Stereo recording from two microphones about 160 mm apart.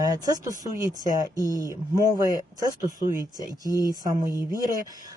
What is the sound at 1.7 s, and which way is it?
Speech, 20° right (ahead or behind).